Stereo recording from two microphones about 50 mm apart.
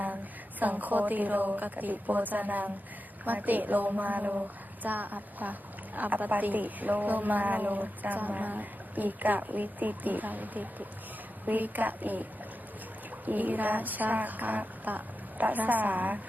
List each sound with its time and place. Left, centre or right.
0.6 s a woman's voice: right
13.2 s a woman's voice: right